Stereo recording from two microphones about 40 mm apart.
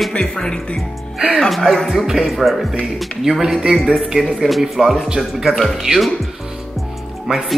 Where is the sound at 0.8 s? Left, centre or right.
Centre.